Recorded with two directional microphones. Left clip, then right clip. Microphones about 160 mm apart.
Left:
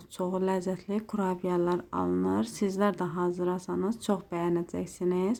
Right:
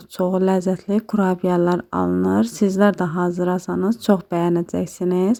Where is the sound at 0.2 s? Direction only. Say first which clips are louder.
Right 11 dB; 45° right (ahead or behind).